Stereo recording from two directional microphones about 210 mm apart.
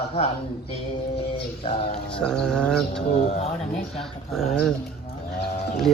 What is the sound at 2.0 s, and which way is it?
Speech, 5° left (ahead or behind).